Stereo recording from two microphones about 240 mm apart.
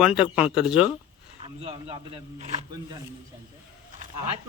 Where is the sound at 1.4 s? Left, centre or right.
Right.